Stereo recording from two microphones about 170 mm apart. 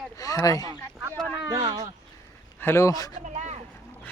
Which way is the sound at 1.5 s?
25° right (ahead or behind).